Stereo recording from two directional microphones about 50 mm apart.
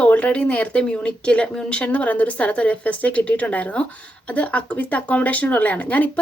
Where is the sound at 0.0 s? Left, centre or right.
Left.